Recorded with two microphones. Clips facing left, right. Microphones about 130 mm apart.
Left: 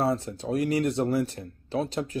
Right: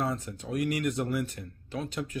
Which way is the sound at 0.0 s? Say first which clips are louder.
Left 6 dB; 35° left (ahead or behind).